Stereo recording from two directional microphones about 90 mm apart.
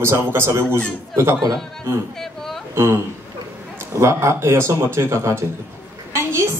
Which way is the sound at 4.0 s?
30° right (ahead or behind).